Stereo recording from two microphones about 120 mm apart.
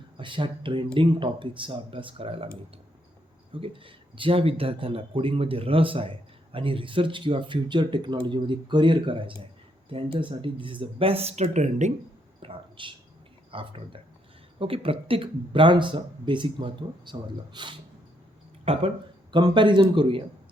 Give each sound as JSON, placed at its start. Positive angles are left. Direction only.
{"t": 0.2, "sound": "speech", "side_deg": -45}
{"t": 3.5, "sound": "speech", "side_deg": -45}
{"t": 12.4, "sound": "a sound", "side_deg": -45}
{"t": 13.5, "sound": "speech", "side_deg": -50}
{"t": 18.6, "sound": "speech", "side_deg": -55}
{"t": 19.3, "sound": "speech", "side_deg": -40}